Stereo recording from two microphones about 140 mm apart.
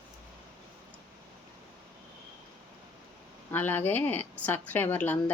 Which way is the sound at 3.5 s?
15° left (ahead or behind).